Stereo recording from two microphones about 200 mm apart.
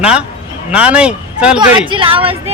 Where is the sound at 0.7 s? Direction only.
5° right (ahead or behind).